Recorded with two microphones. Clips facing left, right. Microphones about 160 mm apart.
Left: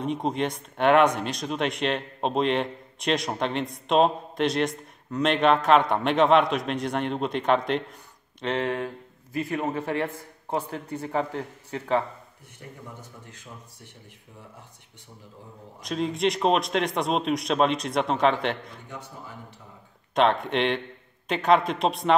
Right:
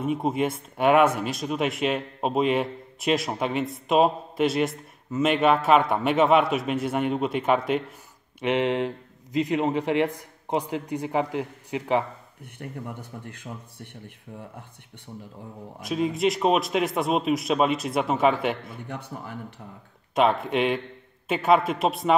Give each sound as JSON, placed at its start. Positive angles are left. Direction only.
{"t": 0.0, "sound": "speech", "side_deg": -5}
{"t": 12.6, "sound": "speech", "side_deg": -60}
{"t": 15.8, "sound": "speech", "side_deg": -5}
{"t": 18.9, "sound": "speech", "side_deg": -60}
{"t": 20.2, "sound": "speech", "side_deg": -5}